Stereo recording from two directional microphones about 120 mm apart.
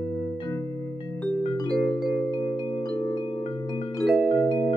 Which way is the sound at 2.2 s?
35° left (ahead or behind).